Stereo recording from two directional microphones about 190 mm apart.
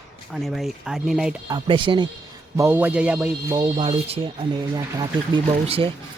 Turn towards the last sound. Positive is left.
turn(degrees=-25)  # may be behind; listen again after turning